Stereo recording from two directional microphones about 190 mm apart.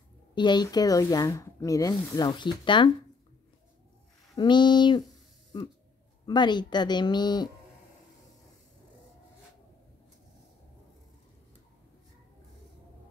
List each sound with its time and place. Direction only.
0.3 s speech: 25° left (ahead or behind)
4.4 s speech: 25° left (ahead or behind)